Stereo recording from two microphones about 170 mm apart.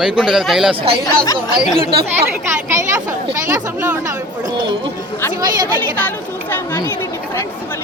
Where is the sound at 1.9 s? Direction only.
70° right (ahead or behind).